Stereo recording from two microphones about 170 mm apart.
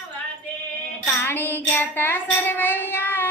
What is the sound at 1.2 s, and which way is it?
Child singing, 10° left (ahead or behind).